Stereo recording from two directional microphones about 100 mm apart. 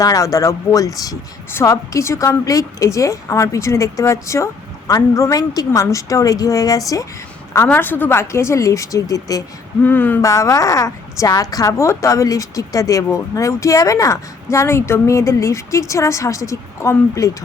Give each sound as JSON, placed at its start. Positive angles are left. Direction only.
{"t": 0.0, "sound": "a woman's voice", "side_deg": 35}
{"t": 7.7, "sound": "speech", "side_deg": 20}
{"t": 9.8, "sound": "speech", "side_deg": 20}
{"t": 10.2, "sound": "a woman's voice", "side_deg": 30}